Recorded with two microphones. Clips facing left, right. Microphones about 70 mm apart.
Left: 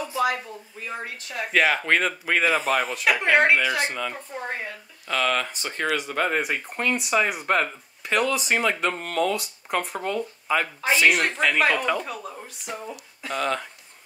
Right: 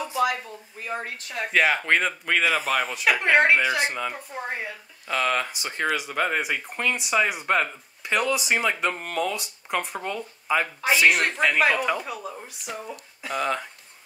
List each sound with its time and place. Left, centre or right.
0.1 s a sound: left
1.0 s speech: right
1.4 s speech: centre